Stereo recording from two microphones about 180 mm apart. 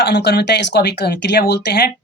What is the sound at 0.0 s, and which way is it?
Speech, 70° left (ahead or behind).